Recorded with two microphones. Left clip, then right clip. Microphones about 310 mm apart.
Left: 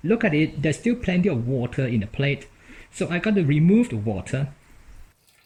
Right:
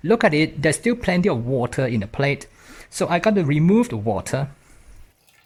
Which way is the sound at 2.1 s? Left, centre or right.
Right.